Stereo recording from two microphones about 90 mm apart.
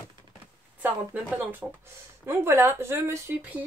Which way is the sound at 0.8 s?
20° right (ahead or behind).